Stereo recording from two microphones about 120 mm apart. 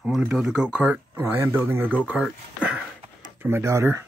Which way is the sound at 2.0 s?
10° right (ahead or behind).